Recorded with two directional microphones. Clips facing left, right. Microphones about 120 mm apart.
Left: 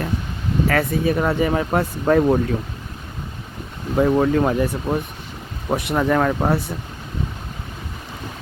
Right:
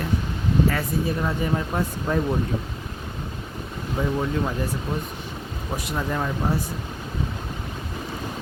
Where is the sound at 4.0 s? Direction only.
70° left (ahead or behind).